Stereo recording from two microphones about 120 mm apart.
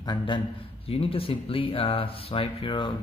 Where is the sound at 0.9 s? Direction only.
55° left (ahead or behind).